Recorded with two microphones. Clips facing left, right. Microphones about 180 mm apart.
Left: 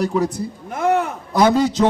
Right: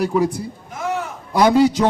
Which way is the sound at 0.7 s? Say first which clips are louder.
Left 7 dB; 60° left (ahead or behind).